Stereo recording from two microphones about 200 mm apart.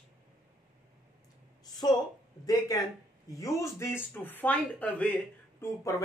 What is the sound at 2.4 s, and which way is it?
Speech, 20° left (ahead or behind).